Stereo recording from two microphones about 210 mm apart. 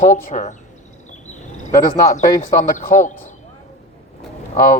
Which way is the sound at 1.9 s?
40° left (ahead or behind).